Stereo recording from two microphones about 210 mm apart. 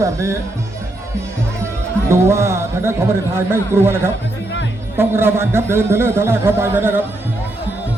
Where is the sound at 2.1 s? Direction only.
10° right (ahead or behind).